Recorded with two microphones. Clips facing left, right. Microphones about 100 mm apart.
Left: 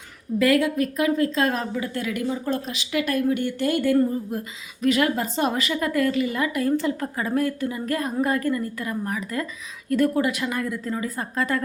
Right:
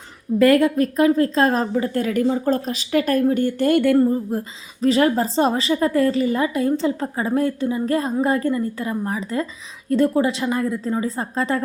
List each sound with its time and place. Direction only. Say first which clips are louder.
0.3 s a woman's voice: right 5 dB; 40° right (ahead or behind); by 11.6 s 25° right (ahead or behind)